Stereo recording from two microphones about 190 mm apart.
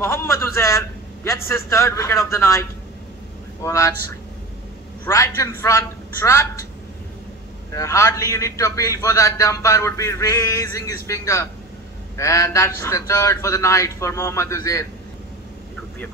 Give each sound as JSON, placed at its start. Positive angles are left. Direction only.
{"t": 0.0, "sound": "a man's voice", "side_deg": 15}
{"t": 3.6, "sound": "a man's voice", "side_deg": 15}
{"t": 7.7, "sound": "a man's voice", "side_deg": 15}